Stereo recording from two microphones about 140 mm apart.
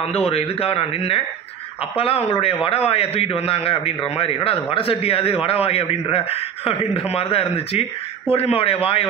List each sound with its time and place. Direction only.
0.0 s a man's voice: 45° left (ahead or behind)